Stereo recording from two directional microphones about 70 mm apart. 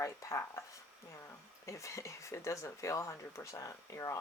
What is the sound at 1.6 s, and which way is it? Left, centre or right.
Speech, left.